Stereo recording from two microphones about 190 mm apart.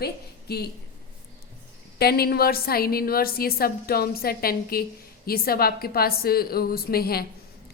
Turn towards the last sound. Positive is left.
turn(degrees=55)  # may be behind; listen again after turning